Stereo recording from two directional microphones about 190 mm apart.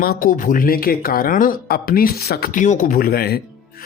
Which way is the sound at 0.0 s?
50° left (ahead or behind).